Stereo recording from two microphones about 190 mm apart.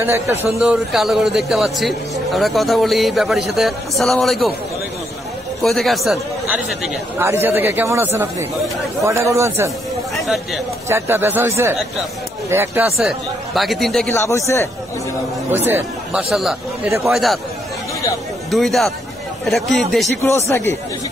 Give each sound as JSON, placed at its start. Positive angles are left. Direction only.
{"t": 0.0, "sound": "a man's voice", "side_deg": -15}
{"t": 0.6, "sound": "a man's voice", "side_deg": 0}
{"t": 5.6, "sound": "a man's voice", "side_deg": 0}
{"t": 10.1, "sound": "speech", "side_deg": 0}
{"t": 10.9, "sound": "a man's voice", "side_deg": -15}
{"t": 12.9, "sound": "a man's voice", "side_deg": 0}
{"t": 14.1, "sound": "a man's voice", "side_deg": 15}
{"t": 15.5, "sound": "a man's voice", "side_deg": -10}
{"t": 18.5, "sound": "a man's voice", "side_deg": 0}
{"t": 20.2, "sound": "a man's voice", "side_deg": 15}